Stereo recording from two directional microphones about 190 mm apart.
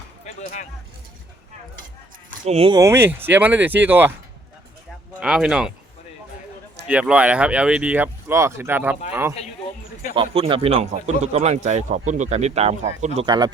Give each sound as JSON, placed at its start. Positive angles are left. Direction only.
{"t": 0.3, "sound": "speech", "side_deg": 40}
{"t": 2.4, "sound": "a man's voice", "side_deg": -35}
{"t": 2.7, "sound": "speech", "side_deg": -15}
{"t": 5.2, "sound": "speech", "side_deg": -5}
{"t": 6.8, "sound": "speech", "side_deg": -5}
{"t": 10.2, "sound": "a man's voice", "side_deg": -30}
{"t": 13.1, "sound": "speech", "side_deg": -20}